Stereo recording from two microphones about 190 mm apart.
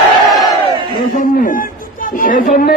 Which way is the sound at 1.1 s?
45° left (ahead or behind).